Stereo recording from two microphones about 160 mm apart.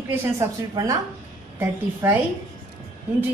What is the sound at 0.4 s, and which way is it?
A woman's voice, 25° right (ahead or behind).